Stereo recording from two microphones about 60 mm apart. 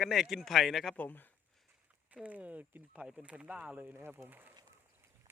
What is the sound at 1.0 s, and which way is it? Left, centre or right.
Speech, left.